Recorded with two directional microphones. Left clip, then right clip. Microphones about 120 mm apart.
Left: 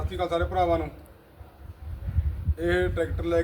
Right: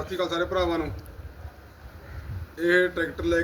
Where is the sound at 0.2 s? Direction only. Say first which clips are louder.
Left 1 dB; 30° left (ahead or behind).